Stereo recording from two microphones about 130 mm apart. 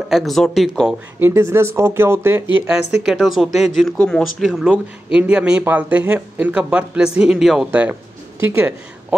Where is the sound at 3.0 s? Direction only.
Centre (ahead or behind).